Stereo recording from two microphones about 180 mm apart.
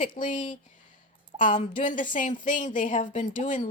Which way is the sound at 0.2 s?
45° left (ahead or behind).